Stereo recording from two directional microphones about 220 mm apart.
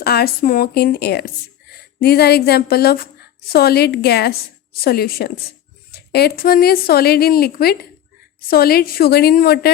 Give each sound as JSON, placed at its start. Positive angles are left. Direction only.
{"t": 0.0, "sound": "a woman's voice", "side_deg": 45}